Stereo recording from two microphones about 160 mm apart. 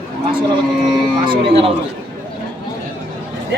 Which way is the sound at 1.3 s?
35° right (ahead or behind).